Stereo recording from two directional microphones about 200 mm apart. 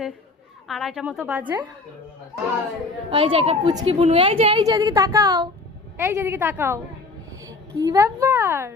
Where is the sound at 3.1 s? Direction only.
30° right (ahead or behind); by 8.7 s 10° right (ahead or behind).